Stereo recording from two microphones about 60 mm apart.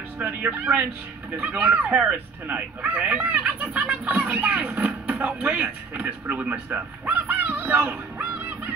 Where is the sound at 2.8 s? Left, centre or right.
Centre.